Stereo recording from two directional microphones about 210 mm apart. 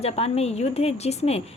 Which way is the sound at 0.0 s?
30° left (ahead or behind).